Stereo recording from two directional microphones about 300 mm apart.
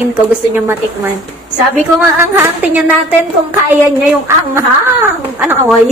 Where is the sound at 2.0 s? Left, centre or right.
Centre.